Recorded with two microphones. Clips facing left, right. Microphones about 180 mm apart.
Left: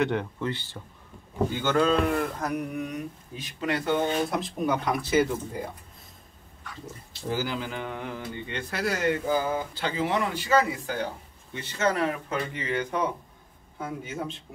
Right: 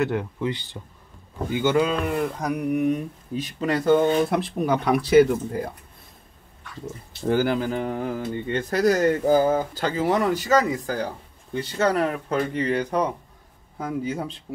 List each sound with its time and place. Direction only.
0.0 s speech: 5° right (ahead or behind)
0.5 s speech: 15° right (ahead or behind)
3.6 s speech: 40° right (ahead or behind)
4.3 s speech: 65° right (ahead or behind)
7.2 s speech: 55° right (ahead or behind); by 14.3 s 35° right (ahead or behind)